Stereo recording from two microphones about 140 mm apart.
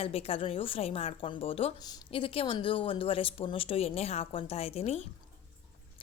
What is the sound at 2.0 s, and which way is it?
A woman's voice, 40° left (ahead or behind).